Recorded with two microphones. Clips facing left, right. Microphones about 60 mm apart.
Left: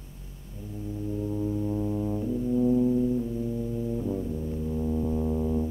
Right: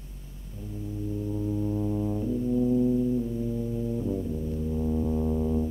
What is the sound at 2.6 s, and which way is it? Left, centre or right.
Brass instrument, centre.